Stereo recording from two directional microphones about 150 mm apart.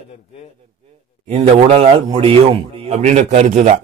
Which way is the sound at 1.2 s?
40° right (ahead or behind).